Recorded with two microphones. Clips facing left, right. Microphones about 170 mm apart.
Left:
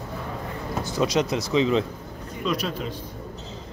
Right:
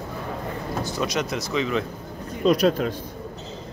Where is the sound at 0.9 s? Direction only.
25° left (ahead or behind).